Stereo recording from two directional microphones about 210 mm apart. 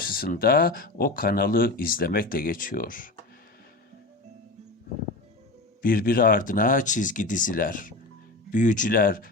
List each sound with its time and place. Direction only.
0.1 s speech: 45° left (ahead or behind)
5.8 s speech: 45° left (ahead or behind)